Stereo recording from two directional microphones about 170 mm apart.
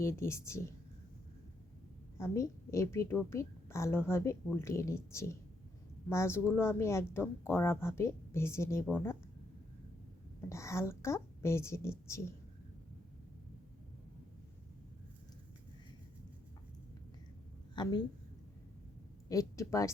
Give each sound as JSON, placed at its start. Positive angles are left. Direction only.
{"t": 0.0, "sound": "a woman's voice", "side_deg": 15}
{"t": 2.1, "sound": "a woman's voice", "side_deg": 15}
{"t": 10.5, "sound": "a woman's voice", "side_deg": 15}
{"t": 17.8, "sound": "a woman's voice", "side_deg": 25}
{"t": 19.3, "sound": "a woman's voice", "side_deg": 20}